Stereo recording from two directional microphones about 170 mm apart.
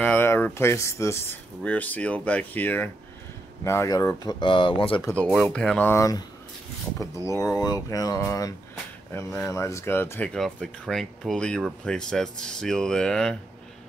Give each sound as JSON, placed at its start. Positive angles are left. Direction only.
{"t": 0.0, "sound": "speech", "side_deg": 10}
{"t": 5.0, "sound": "speech", "side_deg": 5}